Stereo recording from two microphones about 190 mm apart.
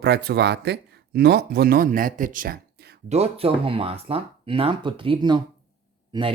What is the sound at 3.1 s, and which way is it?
Speech, 30° right (ahead or behind).